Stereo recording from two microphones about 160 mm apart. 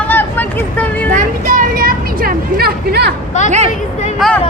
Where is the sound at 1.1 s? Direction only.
55° right (ahead or behind); by 3.1 s 85° right.